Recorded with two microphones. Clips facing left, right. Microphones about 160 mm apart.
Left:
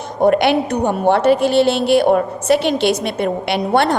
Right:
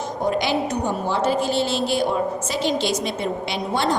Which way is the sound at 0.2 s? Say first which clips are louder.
Left 9 dB; 65° left (ahead or behind).